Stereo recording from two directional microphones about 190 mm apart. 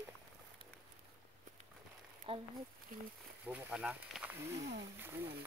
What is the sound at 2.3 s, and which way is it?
Speech, 30° right (ahead or behind).